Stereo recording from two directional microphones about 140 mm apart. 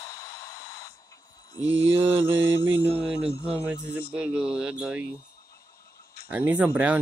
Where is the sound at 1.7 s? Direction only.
40° right (ahead or behind).